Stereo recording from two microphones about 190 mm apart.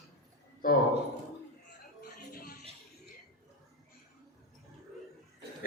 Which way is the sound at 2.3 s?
50° left (ahead or behind).